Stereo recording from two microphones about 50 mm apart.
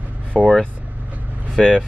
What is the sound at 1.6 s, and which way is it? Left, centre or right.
Speech, centre.